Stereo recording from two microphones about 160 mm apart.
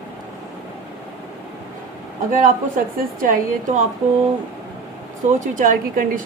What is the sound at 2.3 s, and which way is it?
A woman's voice, 55° right (ahead or behind).